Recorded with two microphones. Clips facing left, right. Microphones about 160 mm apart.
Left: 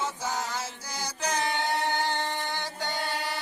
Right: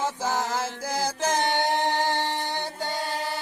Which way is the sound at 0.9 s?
90° right.